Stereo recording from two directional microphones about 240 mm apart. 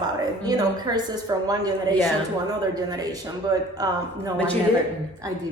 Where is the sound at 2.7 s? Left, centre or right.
Centre.